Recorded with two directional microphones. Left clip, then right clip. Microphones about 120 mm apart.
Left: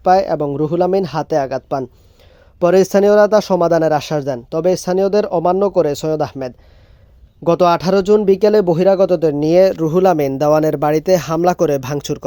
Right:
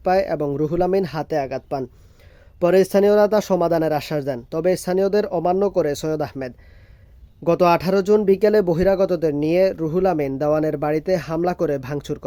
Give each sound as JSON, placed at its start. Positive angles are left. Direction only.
{"t": 0.0, "sound": "speech", "side_deg": 20}